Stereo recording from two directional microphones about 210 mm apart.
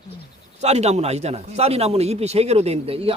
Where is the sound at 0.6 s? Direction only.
30° right (ahead or behind).